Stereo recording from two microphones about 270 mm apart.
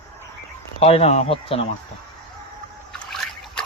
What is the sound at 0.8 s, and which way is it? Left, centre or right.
Speech, left.